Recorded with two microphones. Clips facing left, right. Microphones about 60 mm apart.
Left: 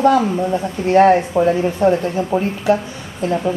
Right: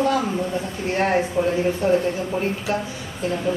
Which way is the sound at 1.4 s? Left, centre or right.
Left.